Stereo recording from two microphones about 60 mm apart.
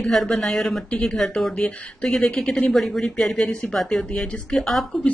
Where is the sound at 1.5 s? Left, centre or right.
Left.